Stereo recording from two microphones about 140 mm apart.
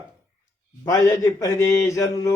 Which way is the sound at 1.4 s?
20° left (ahead or behind).